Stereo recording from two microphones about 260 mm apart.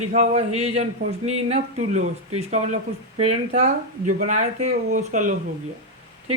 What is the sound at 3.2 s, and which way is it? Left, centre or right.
Speech, right.